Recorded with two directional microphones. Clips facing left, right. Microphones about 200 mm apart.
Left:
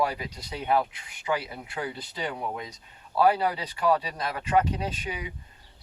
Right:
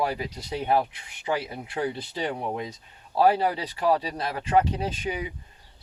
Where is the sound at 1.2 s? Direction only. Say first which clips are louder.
Right 1 dB; 30° right (ahead or behind).